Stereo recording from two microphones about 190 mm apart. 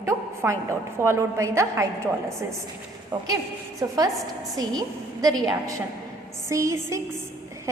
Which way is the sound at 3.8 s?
15° right (ahead or behind).